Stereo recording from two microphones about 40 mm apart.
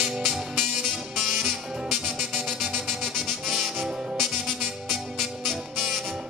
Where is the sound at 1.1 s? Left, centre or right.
Centre.